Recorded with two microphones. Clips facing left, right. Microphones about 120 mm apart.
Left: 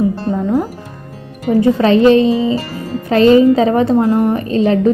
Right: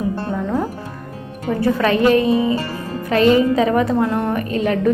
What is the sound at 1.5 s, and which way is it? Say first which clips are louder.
A woman's voice: left 6 dB; 20° left (ahead or behind).